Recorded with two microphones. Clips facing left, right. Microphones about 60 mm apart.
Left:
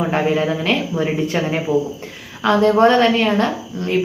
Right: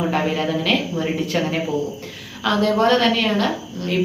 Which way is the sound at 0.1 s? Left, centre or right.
Left.